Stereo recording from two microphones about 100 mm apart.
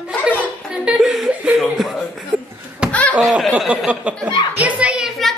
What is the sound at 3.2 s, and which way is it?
Snicker, centre (ahead or behind).